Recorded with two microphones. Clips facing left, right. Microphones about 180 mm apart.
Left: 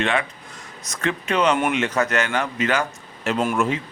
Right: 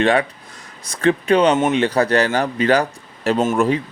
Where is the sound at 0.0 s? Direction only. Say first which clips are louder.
Right 6 dB; 35° right (ahead or behind).